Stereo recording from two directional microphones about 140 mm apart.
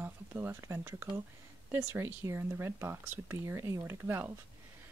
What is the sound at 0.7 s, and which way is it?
Speech, 10° right (ahead or behind).